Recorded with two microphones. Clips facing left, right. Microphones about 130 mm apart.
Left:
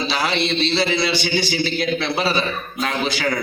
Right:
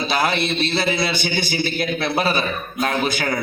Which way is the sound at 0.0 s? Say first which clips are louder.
Right 1 dB; 50° right (ahead or behind).